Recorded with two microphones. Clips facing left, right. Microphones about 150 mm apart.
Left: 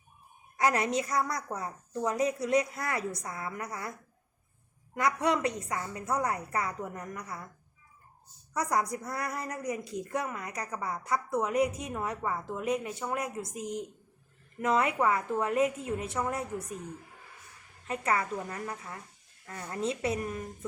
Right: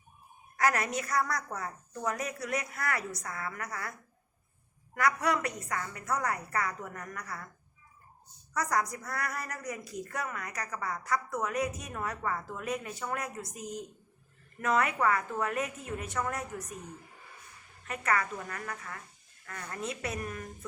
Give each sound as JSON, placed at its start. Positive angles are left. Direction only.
{"t": 0.5, "sound": "a woman's voice", "side_deg": 20}
{"t": 4.9, "sound": "a woman's voice", "side_deg": 25}
{"t": 8.5, "sound": "a woman's voice", "side_deg": 25}
{"t": 17.8, "sound": "a woman's voice", "side_deg": 25}